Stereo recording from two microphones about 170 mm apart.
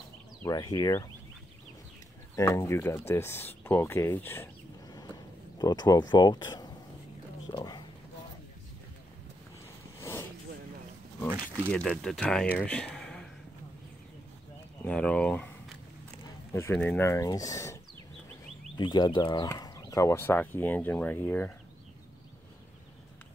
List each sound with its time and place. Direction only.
0.5 s speech: 25° left (ahead or behind)
2.3 s speech: 15° left (ahead or behind)
5.6 s speech: 20° left (ahead or behind)
7.5 s a sound: 25° left (ahead or behind)
9.9 s vehicle: 15° left (ahead or behind)
11.2 s a sound: 15° right (ahead or behind)
12.0 s speech: 5° left (ahead or behind)
12.5 s a sound: 5° left (ahead or behind)
14.9 s speech: 5° left (ahead or behind)
18.8 s speech: 25° left (ahead or behind); by 21.5 s 10° left (ahead or behind)